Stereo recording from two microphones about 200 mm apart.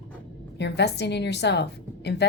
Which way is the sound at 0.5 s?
55° left (ahead or behind).